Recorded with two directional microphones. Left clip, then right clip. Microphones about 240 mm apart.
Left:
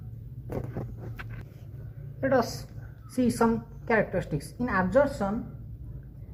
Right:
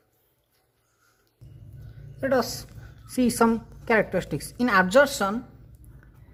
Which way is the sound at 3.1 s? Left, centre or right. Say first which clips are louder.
Right 3 dB; right.